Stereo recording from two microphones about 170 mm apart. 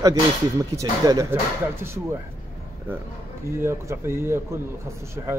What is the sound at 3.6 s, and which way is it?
Speech, 15° right (ahead or behind).